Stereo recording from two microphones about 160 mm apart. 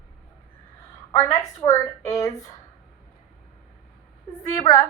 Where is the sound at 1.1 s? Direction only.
20° left (ahead or behind).